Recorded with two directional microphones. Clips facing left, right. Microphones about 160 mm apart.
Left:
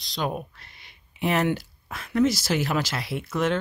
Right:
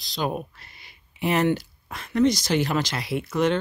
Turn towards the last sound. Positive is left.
turn(degrees=0)  # may be behind; listen again after turning